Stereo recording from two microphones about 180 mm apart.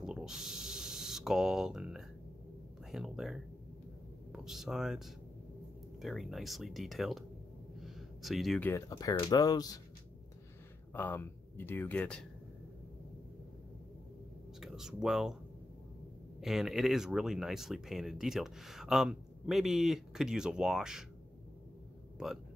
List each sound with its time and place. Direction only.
0.0 s snake: 5° right (ahead or behind)
2.9 s speech: centre (ahead or behind); by 9.7 s 20° left (ahead or behind)
10.9 s speech: 10° left (ahead or behind)
14.6 s speech: centre (ahead or behind)
16.3 s speech: centre (ahead or behind)